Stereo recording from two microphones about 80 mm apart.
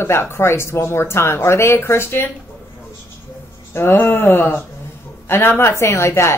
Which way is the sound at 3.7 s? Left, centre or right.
Left.